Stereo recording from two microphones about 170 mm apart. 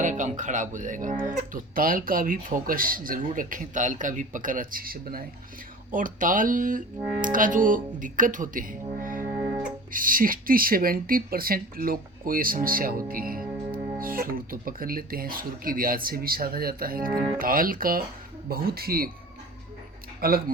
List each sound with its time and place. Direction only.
0.0 s speech: 45° right (ahead or behind)
20.2 s speech: 60° right (ahead or behind)